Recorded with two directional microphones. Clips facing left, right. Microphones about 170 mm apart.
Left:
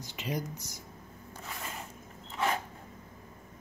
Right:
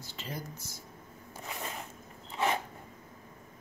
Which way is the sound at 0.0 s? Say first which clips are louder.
Left 6 dB; 15° left (ahead or behind).